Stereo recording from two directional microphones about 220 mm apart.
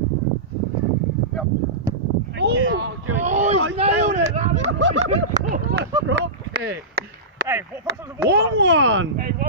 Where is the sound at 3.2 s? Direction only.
30° right (ahead or behind).